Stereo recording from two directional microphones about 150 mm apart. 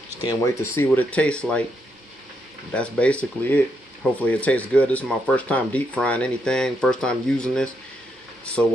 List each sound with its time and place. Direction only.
0.2 s speech: 20° left (ahead or behind)
0.7 s speech: 10° left (ahead or behind)
2.7 s speech: 5° left (ahead or behind)